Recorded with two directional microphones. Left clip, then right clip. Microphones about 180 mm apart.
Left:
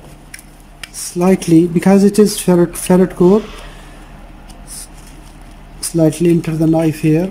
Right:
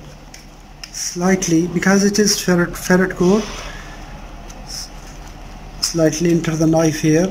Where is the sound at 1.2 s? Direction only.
15° left (ahead or behind).